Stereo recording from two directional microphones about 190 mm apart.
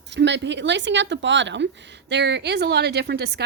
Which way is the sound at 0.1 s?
65° right (ahead or behind).